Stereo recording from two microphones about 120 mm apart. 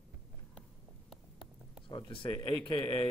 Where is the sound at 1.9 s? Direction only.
40° left (ahead or behind).